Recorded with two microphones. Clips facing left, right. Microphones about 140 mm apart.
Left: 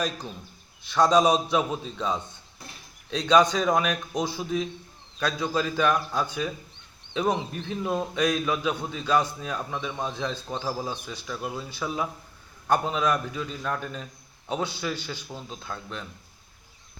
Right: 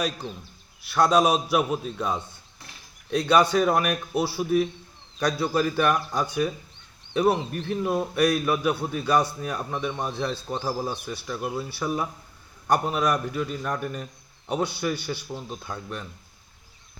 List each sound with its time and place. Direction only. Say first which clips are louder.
0.9 s a man's voice: even; 10° right (ahead or behind)
7.7 s a man's voice: right 3 dB; 10° right (ahead or behind)